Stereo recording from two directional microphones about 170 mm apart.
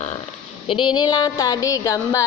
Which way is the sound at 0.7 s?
30° left (ahead or behind).